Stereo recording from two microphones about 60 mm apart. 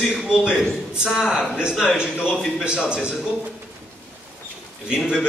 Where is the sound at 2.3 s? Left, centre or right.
Centre.